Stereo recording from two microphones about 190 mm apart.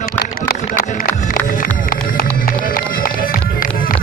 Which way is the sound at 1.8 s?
45° left (ahead or behind).